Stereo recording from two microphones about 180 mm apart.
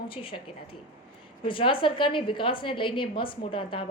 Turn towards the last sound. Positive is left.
turn(degrees=30)  # may be behind; listen again after turning